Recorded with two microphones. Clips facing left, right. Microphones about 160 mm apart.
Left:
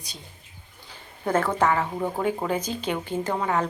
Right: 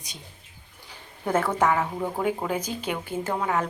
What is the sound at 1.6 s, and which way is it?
Speech, 10° right (ahead or behind).